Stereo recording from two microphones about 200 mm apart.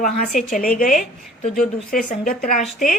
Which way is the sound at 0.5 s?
45° left (ahead or behind).